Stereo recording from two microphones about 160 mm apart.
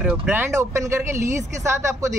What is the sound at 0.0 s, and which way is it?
Speech, 10° right (ahead or behind).